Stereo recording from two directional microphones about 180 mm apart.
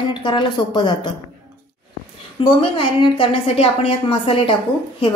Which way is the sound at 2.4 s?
30° left (ahead or behind).